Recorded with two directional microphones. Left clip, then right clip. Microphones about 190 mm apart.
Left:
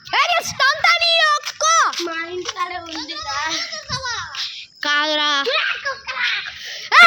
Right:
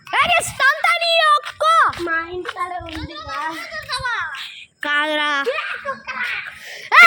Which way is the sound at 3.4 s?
30° left (ahead or behind).